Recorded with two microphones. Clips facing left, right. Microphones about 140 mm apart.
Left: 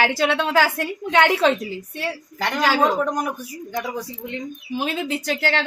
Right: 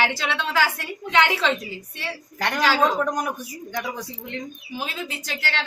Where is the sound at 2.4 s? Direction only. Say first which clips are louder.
Left 1 dB; centre (ahead or behind).